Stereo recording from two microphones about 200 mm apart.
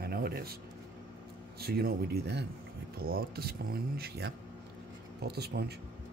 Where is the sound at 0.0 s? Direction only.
50° right (ahead or behind).